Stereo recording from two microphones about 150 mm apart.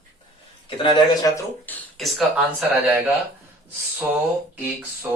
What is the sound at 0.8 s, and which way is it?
Speech, 30° left (ahead or behind).